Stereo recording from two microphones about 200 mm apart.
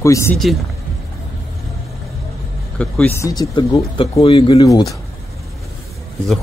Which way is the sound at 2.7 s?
5° left (ahead or behind).